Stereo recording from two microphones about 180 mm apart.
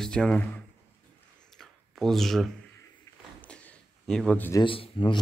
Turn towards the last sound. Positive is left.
turn(degrees=30)  # may be behind; listen again after turning